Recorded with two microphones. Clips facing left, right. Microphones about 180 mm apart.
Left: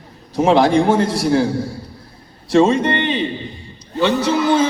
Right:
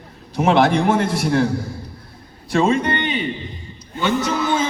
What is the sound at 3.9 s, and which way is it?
Speech, 35° left (ahead or behind).